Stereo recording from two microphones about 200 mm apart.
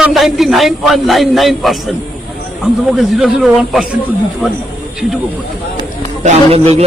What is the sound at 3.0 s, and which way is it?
Speech, 5° right (ahead or behind).